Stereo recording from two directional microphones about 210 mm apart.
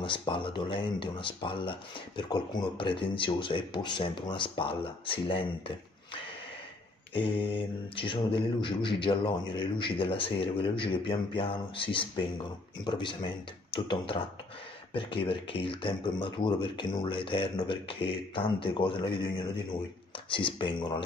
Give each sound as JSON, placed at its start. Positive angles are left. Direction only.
{"t": 0.0, "sound": "speech", "side_deg": 25}
{"t": 20.2, "sound": "speech", "side_deg": 25}